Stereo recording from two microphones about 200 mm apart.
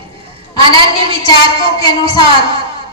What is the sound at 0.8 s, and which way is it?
A woman's voice, 25° right (ahead or behind).